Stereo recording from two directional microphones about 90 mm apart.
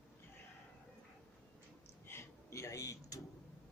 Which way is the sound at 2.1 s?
30° left (ahead or behind).